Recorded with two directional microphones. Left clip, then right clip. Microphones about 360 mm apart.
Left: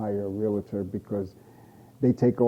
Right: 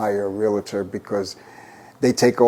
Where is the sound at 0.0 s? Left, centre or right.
Centre.